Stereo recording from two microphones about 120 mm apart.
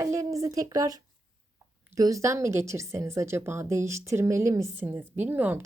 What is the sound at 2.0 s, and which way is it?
A woman's voice, 30° right (ahead or behind).